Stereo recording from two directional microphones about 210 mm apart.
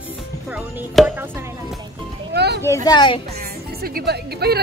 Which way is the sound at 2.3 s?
50° right (ahead or behind).